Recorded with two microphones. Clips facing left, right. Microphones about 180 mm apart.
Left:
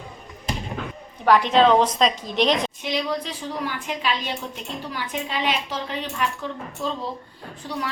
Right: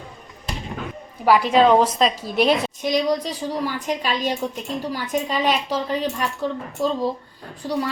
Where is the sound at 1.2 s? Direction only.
5° right (ahead or behind).